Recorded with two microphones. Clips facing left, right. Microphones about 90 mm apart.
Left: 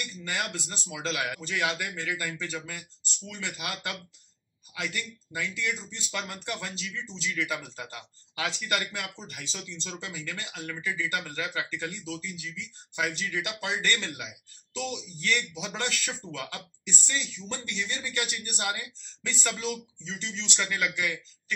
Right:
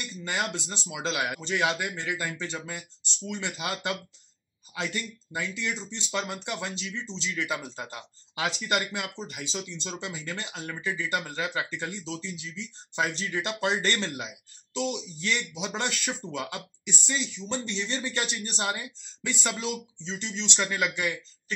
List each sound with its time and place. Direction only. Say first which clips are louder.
0.0 s speech: right 2 dB; 25° right (ahead or behind)